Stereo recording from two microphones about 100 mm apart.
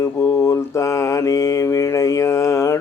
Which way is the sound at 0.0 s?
30° left (ahead or behind).